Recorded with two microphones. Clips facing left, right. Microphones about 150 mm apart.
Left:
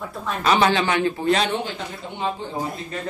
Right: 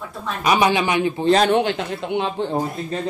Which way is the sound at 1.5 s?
75° right (ahead or behind).